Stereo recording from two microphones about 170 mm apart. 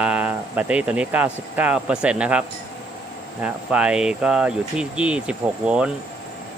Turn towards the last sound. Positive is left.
turn(degrees=-5)  # may be behind; listen again after turning